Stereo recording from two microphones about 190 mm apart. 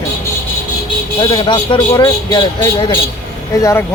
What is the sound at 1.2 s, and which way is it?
Speech, 25° left (ahead or behind).